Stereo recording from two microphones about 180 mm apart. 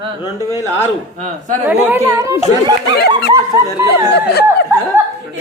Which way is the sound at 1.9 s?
15° right (ahead or behind).